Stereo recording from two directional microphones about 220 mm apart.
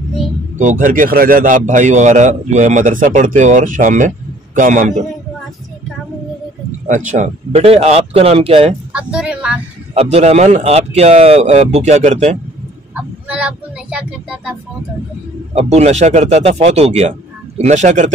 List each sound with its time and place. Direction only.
0.6 s a man's voice: 35° right (ahead or behind)
7.1 s speech: 30° right (ahead or behind)
8.9 s speech: 5° right (ahead or behind)
9.9 s speech: 30° right (ahead or behind)
13.3 s speech: 5° right (ahead or behind)
15.5 s a man's voice: 30° right (ahead or behind)